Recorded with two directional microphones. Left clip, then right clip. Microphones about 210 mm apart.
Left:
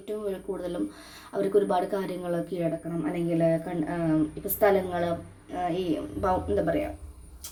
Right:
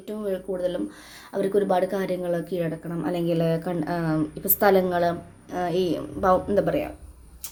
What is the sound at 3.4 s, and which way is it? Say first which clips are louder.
A woman's voice: even; 30° right (ahead or behind).